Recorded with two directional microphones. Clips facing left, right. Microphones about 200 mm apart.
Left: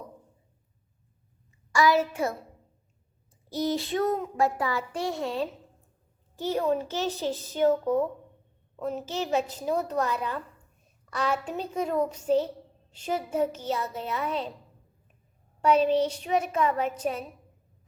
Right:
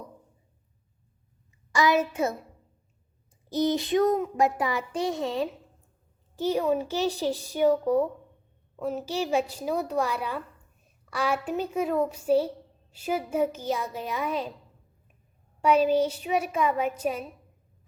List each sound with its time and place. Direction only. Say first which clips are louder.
1.7 s a child's voice: even; 20° right (ahead or behind)
3.5 s child singing: right 4 dB; 20° right (ahead or behind)
6.5 s child singing: right 1 dB; 15° right (ahead or behind)
8.7 s a woman's voice: right 1 dB; 5° right (ahead or behind)
9.1 s child singing: right 1 dB; 10° right (ahead or behind)
15.6 s child singing: right 1 dB; 10° right (ahead or behind)